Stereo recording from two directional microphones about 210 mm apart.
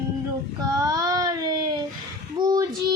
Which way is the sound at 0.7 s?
15° right (ahead or behind).